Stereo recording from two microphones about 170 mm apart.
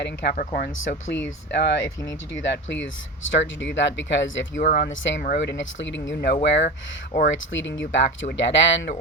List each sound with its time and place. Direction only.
0.0 s speech: 90° left
0.3 s speech: 60° left (ahead or behind)
1.5 s speech: 90° left
4.6 s speech: 55° left (ahead or behind)
4.9 s speech: 90° left
5.2 s speech: 75° left (ahead or behind)
6.6 s speech: 45° left (ahead or behind)
7.3 s speech: 90° left